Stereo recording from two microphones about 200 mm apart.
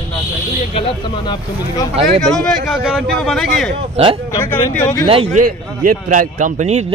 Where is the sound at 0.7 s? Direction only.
20° left (ahead or behind).